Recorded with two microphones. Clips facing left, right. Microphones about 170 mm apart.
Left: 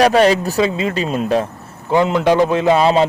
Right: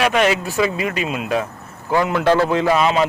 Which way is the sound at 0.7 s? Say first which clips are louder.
Left 3 dB; 25° left (ahead or behind).